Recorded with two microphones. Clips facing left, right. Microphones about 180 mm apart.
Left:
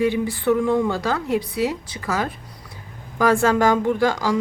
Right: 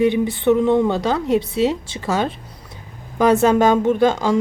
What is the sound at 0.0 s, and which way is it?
A woman's voice, 20° right (ahead or behind).